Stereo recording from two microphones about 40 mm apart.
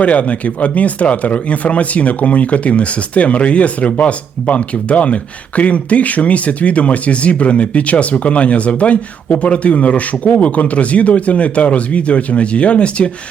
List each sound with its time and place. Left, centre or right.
0.0 s speech: left